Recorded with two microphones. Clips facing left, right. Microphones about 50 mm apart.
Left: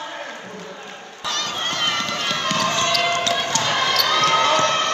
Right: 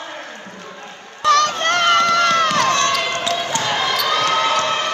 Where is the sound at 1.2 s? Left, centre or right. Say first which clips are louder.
Right 11 dB; right.